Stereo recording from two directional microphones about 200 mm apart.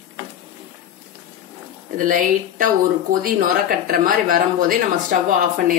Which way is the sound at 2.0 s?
40° right (ahead or behind).